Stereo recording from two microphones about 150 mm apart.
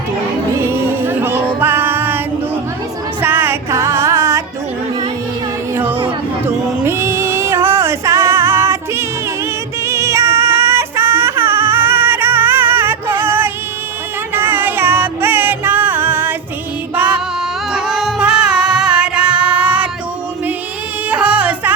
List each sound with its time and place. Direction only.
0.5 s music: 15° right (ahead or behind)
5.7 s a sound: 15° right (ahead or behind)
6.8 s music: 15° right (ahead or behind)
17.7 s music: 5° right (ahead or behind)
21.1 s music: 10° right (ahead or behind)